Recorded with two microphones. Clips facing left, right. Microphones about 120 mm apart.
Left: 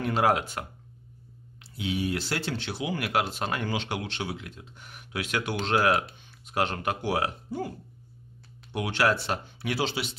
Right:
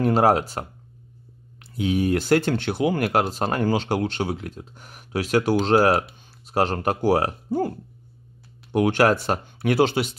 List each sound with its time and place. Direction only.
0.0 s speech: 40° right (ahead or behind)
1.8 s speech: 45° right (ahead or behind)
8.7 s speech: 50° right (ahead or behind)